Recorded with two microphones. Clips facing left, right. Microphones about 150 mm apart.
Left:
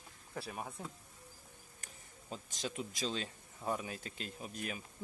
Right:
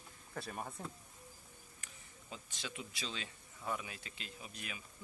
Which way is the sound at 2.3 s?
40° left (ahead or behind).